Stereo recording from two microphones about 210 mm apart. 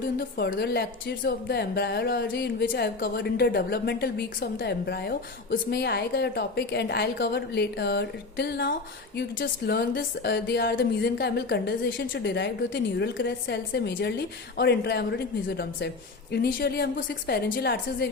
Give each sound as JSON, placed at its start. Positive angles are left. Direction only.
{"t": 0.2, "sound": "a woman's voice", "side_deg": 45}